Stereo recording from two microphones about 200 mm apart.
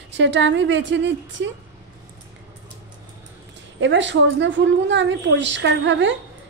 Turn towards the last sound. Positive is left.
turn(degrees=-65)  # may be behind; listen again after turning